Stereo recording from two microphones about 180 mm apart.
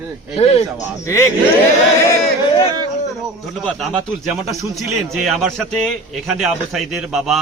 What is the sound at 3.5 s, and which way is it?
A man's voice, centre (ahead or behind).